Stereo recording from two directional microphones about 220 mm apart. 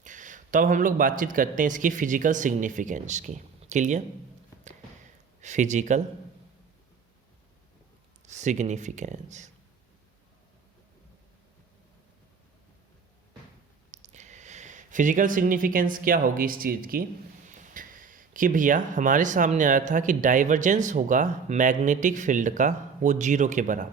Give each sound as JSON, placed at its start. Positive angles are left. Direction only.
{"t": 0.0, "sound": "speech", "side_deg": -35}
{"t": 5.4, "sound": "speech", "side_deg": -35}
{"t": 8.3, "sound": "speech", "side_deg": -30}
{"t": 13.9, "sound": "speech", "side_deg": -30}